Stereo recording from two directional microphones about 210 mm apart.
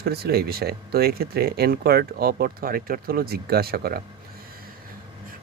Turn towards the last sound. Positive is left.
turn(degrees=-45)  # may be behind; listen again after turning